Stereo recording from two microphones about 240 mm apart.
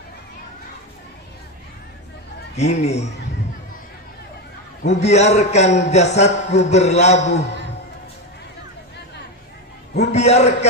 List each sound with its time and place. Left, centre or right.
2.5 s a man's voice: left
4.8 s a man's voice: left
10.1 s a man's voice: left